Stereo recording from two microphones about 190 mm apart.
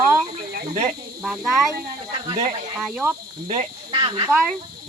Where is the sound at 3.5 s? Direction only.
35° right (ahead or behind).